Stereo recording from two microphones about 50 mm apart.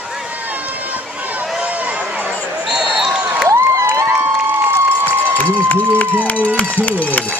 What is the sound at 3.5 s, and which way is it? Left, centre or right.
Crowd, right.